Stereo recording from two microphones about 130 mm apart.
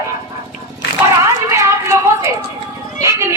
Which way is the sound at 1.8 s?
20° right (ahead or behind).